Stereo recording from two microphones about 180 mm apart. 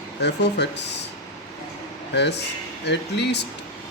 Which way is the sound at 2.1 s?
70° left (ahead or behind).